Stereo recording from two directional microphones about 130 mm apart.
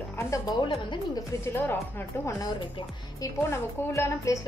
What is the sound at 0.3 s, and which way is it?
Speech, 30° left (ahead or behind).